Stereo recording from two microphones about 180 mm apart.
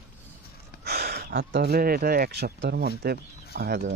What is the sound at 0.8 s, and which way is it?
Speech, 60° right (ahead or behind).